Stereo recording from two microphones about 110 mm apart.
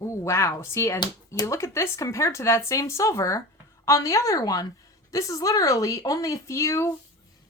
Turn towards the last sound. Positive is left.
turn(degrees=25)  # may be behind; listen again after turning